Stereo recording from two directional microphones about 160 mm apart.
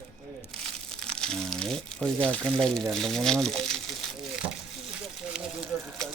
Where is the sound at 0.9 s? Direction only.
5° left (ahead or behind).